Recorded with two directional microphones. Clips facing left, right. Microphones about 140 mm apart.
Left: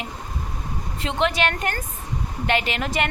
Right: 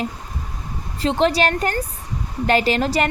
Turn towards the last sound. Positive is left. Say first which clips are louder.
# right 6 dB
turn(degrees=-35)  # may be behind; listen again after turning